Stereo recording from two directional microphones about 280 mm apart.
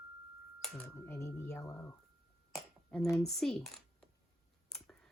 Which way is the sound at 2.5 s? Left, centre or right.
Centre.